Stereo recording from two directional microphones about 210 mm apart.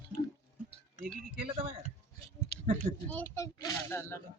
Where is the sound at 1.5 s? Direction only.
25° right (ahead or behind).